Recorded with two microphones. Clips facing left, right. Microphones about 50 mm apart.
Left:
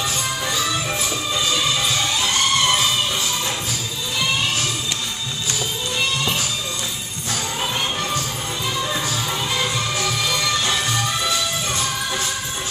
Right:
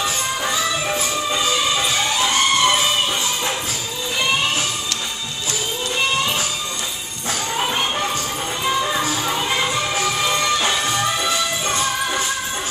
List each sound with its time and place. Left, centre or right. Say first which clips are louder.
0.5 s music: right 2 dB; right
7.5 s music: right 4 dB; right